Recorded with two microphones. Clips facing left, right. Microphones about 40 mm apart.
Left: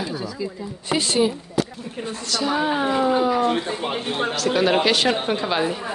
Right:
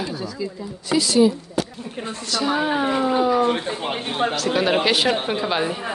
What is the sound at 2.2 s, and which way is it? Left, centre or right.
A woman's voice, centre.